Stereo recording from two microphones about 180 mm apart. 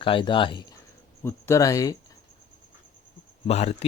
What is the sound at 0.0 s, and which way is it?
Speech, 30° left (ahead or behind).